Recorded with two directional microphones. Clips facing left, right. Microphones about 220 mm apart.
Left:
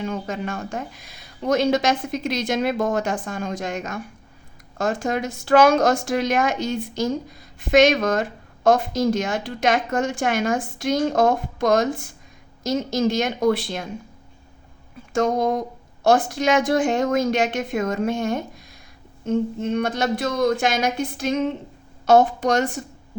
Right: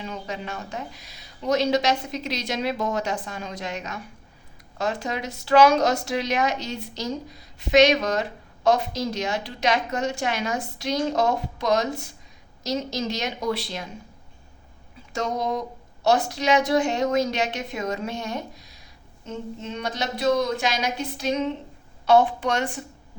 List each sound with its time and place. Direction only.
0.0 s a woman's voice: 50° left (ahead or behind)
15.1 s a woman's voice: 50° left (ahead or behind)